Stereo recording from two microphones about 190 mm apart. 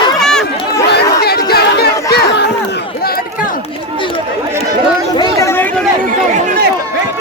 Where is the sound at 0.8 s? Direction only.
60° left (ahead or behind).